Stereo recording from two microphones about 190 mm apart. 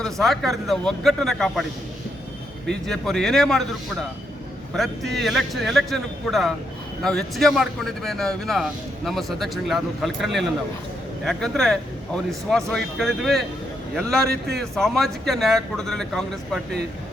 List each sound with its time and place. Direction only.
0.0 s a man's voice: centre (ahead or behind)
2.6 s a man's voice: centre (ahead or behind)
5.1 s a man's voice: centre (ahead or behind)
14.3 s a man's voice: 55° right (ahead or behind)
14.6 s a man's voice: centre (ahead or behind)